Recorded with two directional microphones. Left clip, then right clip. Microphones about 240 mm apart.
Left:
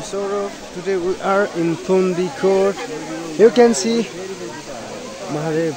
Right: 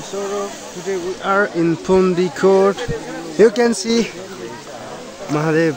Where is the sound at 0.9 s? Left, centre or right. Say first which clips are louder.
Left 1 dB; centre.